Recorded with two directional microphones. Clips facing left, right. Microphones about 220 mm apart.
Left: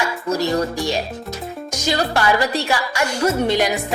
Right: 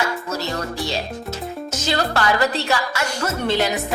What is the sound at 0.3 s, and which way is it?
Speech, 15° left (ahead or behind).